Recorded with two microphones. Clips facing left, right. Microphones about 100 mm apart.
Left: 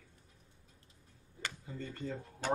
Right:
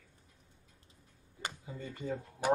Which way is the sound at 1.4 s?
15° right (ahead or behind).